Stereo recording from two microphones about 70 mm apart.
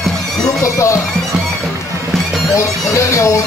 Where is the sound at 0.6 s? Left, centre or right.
Left.